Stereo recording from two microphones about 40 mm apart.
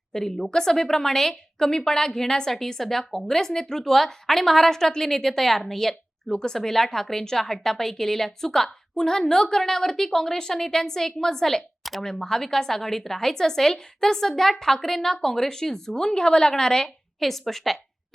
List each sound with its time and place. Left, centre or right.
0.1 s a woman's voice: centre
11.8 s a sound: centre
12.0 s a woman's voice: centre
17.2 s a woman's voice: centre